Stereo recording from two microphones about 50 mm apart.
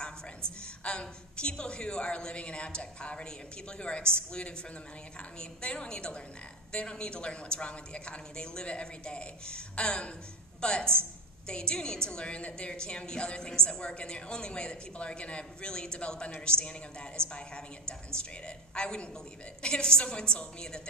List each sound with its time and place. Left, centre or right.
0.8 s a woman's voice: centre